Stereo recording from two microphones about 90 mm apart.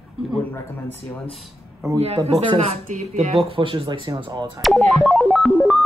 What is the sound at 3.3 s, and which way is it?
Speech, 85° right.